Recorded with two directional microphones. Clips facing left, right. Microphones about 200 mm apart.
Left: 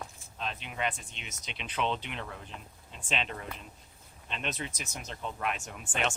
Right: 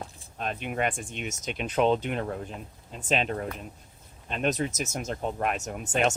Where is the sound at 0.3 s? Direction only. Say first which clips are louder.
Right 7 dB; 50° right (ahead or behind).